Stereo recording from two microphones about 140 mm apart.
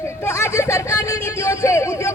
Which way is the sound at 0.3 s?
20° left (ahead or behind).